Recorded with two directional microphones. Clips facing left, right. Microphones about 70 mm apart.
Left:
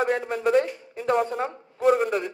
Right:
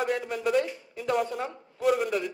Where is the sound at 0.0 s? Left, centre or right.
Left.